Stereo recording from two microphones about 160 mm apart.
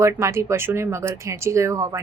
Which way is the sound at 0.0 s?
15° right (ahead or behind).